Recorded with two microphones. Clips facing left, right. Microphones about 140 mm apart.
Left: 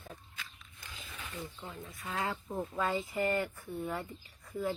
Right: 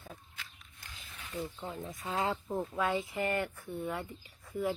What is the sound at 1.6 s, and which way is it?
Speech, 20° right (ahead or behind).